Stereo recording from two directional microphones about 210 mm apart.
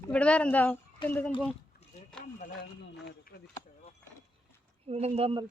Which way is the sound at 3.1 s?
45° left (ahead or behind).